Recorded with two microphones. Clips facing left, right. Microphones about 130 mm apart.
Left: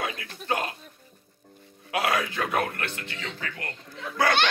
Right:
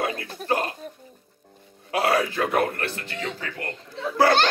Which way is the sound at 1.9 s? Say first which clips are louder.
Right 4 dB; 35° right (ahead or behind).